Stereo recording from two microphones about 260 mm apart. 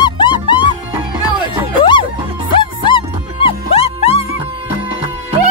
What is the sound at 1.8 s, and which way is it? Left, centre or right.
Music, centre.